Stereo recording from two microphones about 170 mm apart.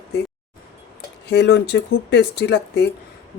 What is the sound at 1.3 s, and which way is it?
Speech, 90° left.